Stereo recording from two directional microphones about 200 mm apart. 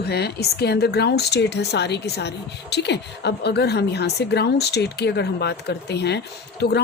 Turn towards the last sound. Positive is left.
turn(degrees=55)  # may be behind; listen again after turning